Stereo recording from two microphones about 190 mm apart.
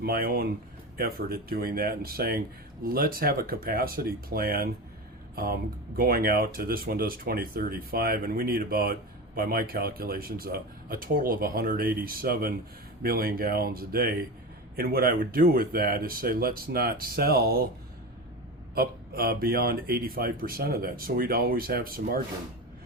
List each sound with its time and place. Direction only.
0.0 s speech: 50° right (ahead or behind)
18.7 s speech: 55° right (ahead or behind)